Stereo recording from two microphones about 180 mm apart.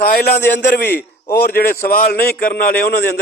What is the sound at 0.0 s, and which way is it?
A man's voice, 60° left (ahead or behind).